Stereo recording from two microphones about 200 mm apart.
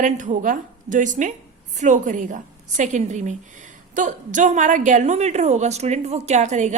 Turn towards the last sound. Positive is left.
turn(degrees=-35)  # may be behind; listen again after turning